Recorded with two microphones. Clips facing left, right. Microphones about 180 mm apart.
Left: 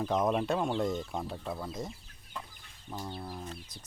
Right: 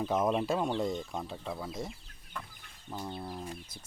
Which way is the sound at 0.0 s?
Centre (ahead or behind).